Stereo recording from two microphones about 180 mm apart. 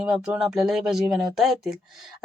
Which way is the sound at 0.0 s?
5° right (ahead or behind).